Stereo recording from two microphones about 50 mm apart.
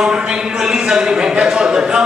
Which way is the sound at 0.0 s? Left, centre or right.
Centre.